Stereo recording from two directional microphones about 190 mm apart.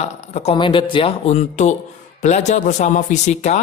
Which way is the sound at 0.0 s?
35° left (ahead or behind).